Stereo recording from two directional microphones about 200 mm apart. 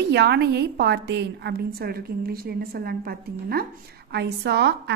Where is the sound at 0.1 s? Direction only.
55° right (ahead or behind).